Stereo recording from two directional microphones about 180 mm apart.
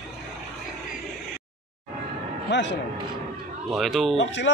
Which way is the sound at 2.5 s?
75° left (ahead or behind).